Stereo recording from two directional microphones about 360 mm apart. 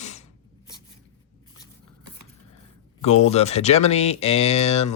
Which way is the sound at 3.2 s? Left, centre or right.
Centre.